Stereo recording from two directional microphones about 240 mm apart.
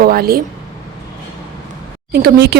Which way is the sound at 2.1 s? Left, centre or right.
Right.